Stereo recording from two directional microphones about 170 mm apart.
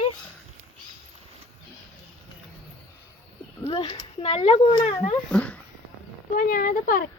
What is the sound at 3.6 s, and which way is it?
A child's voice, 35° left (ahead or behind).